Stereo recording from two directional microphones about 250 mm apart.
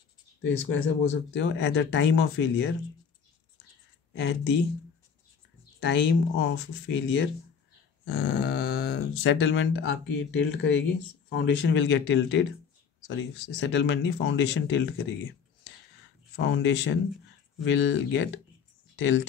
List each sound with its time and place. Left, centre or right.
0.4 s speech: left
4.1 s speech: left
5.8 s speech: left
16.3 s speech: left